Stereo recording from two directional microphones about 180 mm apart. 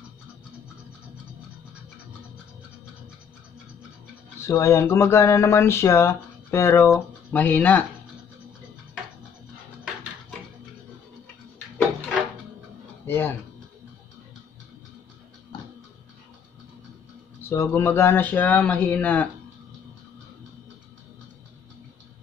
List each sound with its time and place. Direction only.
4.4 s speech: 15° left (ahead or behind)
13.0 s a sound: 10° left (ahead or behind)
17.4 s speech: 15° left (ahead or behind)